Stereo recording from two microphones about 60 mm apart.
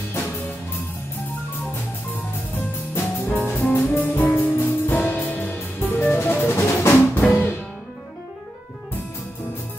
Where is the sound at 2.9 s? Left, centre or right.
Left.